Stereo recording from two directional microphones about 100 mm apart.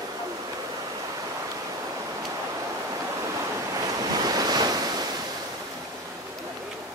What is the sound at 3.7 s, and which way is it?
Waves, 40° right (ahead or behind).